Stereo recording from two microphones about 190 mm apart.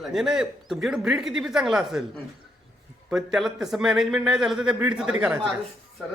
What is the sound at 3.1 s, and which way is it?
Speech, centre (ahead or behind).